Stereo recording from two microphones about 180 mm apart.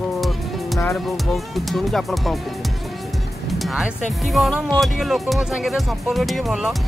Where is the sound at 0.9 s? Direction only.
Centre (ahead or behind).